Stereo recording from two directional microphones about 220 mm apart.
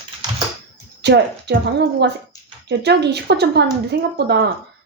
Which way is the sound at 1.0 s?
50° right (ahead or behind).